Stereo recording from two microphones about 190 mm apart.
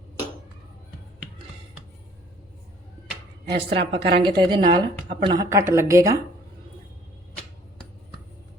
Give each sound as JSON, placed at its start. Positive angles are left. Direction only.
{"t": 3.5, "sound": "a woman's voice", "side_deg": -65}
{"t": 4.2, "sound": "a woman's voice", "side_deg": -25}